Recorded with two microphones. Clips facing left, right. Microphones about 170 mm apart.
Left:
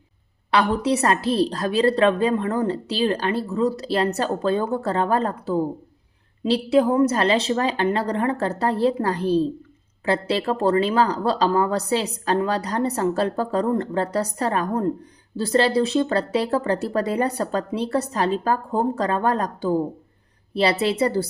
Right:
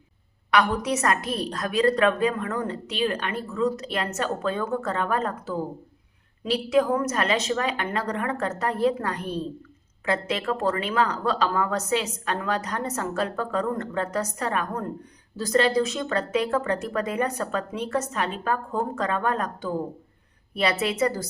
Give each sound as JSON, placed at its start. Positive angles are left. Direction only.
{"t": 0.5, "sound": "a woman's voice", "side_deg": 30}